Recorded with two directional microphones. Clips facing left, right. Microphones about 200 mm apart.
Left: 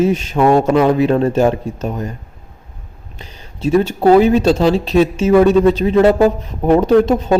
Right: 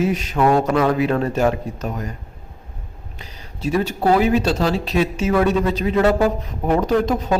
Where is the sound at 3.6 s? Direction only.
25° left (ahead or behind).